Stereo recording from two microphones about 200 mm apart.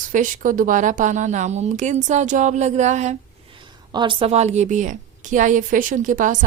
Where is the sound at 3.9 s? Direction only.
25° right (ahead or behind); by 6.5 s 40° right (ahead or behind).